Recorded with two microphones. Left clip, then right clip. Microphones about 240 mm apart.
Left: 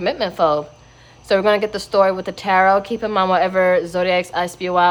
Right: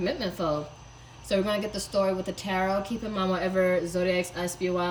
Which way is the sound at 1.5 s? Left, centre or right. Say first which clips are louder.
Left 13 dB; left.